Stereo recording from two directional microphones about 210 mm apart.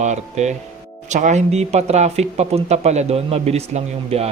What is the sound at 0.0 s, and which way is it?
Speech, 35° right (ahead or behind).